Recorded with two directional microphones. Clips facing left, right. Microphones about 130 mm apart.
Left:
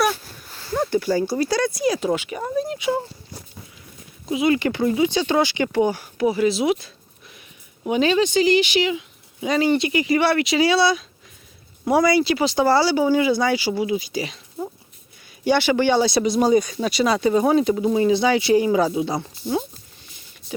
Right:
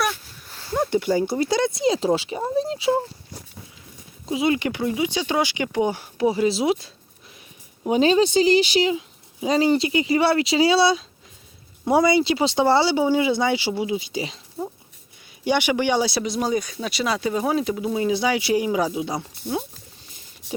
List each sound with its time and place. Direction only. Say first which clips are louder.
0.7 s speech: even; 15° right (ahead or behind)
4.3 s speech: left 2 dB; 30° right (ahead or behind)
4.5 s speech: left 4 dB; 15° right (ahead or behind)
15.4 s speech: left 3 dB; 15° right (ahead or behind)